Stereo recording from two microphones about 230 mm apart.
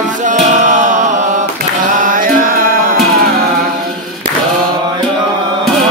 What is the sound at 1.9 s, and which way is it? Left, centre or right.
Music, right.